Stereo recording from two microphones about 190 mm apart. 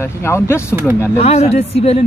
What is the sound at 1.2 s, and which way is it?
Speech, 35° left (ahead or behind).